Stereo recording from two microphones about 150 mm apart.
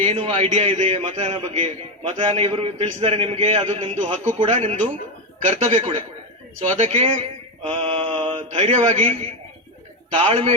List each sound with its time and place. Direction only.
0.0 s a man's voice: 45° right (ahead or behind)
8.4 s a man's voice: 50° right (ahead or behind)